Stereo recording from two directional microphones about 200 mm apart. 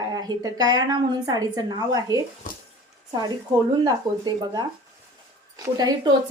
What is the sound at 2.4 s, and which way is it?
Speech, 40° left (ahead or behind).